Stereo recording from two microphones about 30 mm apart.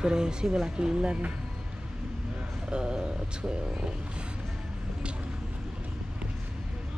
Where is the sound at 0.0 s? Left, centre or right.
Right.